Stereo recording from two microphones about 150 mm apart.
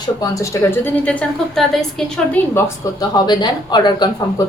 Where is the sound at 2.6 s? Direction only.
20° left (ahead or behind).